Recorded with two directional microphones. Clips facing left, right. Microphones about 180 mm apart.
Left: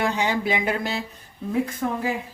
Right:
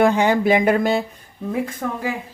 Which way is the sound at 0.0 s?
50° right (ahead or behind).